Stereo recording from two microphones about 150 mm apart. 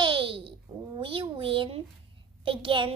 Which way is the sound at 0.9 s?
35° right (ahead or behind).